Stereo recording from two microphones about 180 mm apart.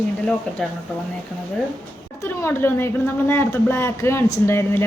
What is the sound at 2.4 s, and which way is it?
A woman's voice, 10° left (ahead or behind).